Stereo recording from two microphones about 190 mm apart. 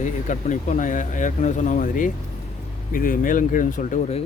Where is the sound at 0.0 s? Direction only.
40° left (ahead or behind).